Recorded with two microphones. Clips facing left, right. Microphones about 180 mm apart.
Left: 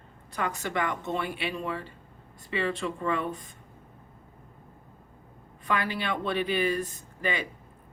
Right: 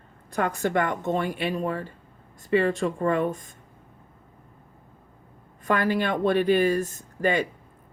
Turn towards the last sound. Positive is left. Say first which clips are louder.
# right 7 dB
turn(degrees=-45)  # may be behind; listen again after turning